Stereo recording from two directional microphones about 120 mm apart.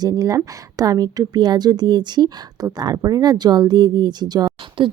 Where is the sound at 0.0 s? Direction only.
30° right (ahead or behind).